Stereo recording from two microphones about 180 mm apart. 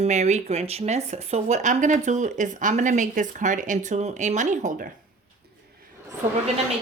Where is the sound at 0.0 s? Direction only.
40° right (ahead or behind).